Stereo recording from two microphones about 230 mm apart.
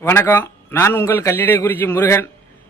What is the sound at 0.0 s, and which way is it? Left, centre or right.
Speech, centre.